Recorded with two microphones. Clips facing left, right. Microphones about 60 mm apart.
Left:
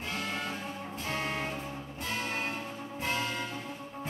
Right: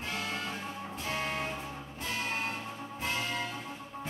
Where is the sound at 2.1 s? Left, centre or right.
Left.